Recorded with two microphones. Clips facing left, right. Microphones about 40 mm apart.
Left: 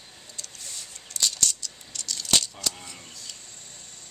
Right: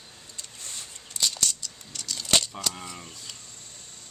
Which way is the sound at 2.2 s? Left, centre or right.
Right.